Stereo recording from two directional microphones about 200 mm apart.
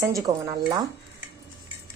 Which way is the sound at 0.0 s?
15° right (ahead or behind).